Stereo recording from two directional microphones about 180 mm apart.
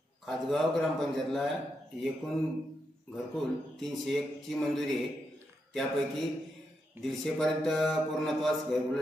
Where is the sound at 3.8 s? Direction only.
Centre (ahead or behind).